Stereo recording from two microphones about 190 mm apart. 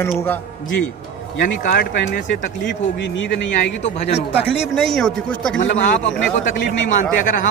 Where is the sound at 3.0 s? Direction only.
70° left (ahead or behind).